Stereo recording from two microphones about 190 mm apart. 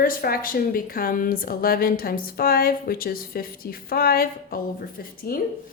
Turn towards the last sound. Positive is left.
turn(degrees=50)  # may be behind; listen again after turning